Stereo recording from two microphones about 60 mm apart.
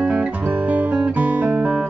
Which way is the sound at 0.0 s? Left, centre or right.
Centre.